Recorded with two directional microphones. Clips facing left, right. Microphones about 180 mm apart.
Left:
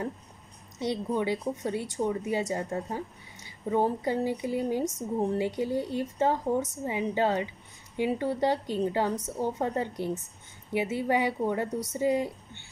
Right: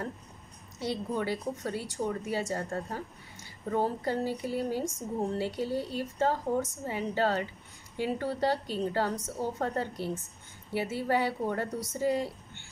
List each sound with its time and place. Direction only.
0.7 s a woman's voice: 20° left (ahead or behind)